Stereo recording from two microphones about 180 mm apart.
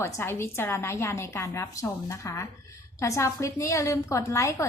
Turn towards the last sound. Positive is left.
turn(degrees=15)  # may be behind; listen again after turning